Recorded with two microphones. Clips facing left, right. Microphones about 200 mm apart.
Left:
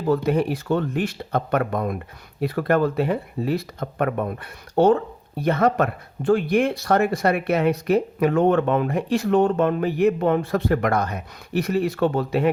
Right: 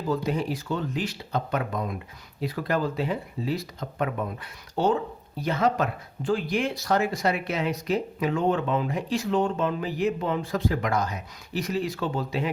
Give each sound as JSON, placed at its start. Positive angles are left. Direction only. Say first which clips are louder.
{"t": 0.1, "sound": "speech", "louder": "left 7 dB", "side_deg": 60}